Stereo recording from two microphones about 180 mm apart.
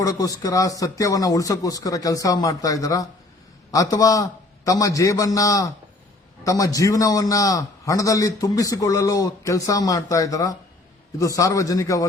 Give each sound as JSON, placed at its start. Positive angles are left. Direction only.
{"t": 0.0, "sound": "a man's voice", "side_deg": 20}